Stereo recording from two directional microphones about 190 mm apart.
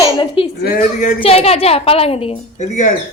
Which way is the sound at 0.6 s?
50° left (ahead or behind).